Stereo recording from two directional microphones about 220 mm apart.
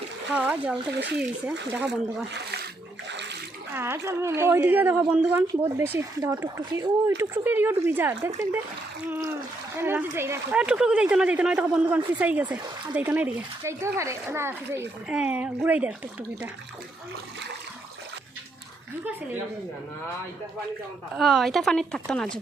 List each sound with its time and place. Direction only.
0.3 s speech: 5° right (ahead or behind)
0.9 s speech: 50° right (ahead or behind)
1.8 s speech: centre (ahead or behind)
2.3 s speech: 50° right (ahead or behind)
3.1 s water: 50° right (ahead or behind)
3.8 s speech: 10° right (ahead or behind)
9.8 s speech: 10° right (ahead or behind)
21.2 s speech: centre (ahead or behind)